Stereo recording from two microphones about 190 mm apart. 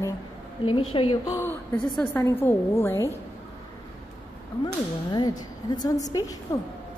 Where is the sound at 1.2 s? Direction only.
15° left (ahead or behind).